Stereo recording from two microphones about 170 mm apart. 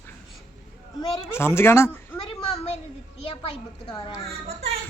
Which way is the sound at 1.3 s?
15° left (ahead or behind).